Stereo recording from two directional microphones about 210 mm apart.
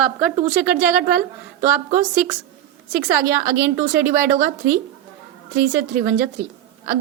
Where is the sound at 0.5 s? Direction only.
10° right (ahead or behind).